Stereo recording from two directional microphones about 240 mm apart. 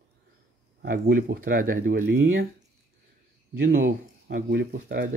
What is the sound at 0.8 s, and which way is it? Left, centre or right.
Speech, right.